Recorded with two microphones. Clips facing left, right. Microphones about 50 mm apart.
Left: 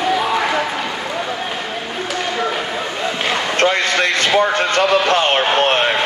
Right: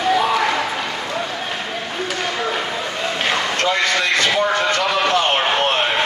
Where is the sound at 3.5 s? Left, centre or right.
Left.